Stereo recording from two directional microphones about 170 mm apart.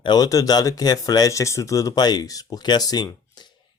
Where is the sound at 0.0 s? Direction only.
25° left (ahead or behind).